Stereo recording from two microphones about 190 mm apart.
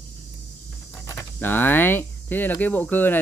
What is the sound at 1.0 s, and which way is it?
Speech, 10° left (ahead or behind).